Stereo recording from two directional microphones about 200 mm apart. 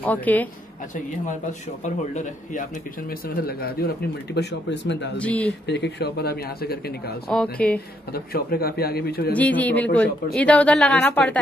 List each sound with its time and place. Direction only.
0.0 s speech: 10° left (ahead or behind)
3.1 s speech: 50° left (ahead or behind)
5.1 s speech: 5° left (ahead or behind)
5.7 s speech: 60° left (ahead or behind)
7.2 s speech: 5° left (ahead or behind)
8.1 s speech: 50° left (ahead or behind)
9.3 s speech: 10° left (ahead or behind)